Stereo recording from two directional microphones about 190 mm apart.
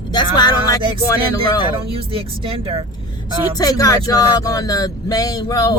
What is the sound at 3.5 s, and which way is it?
Speech, 20° left (ahead or behind).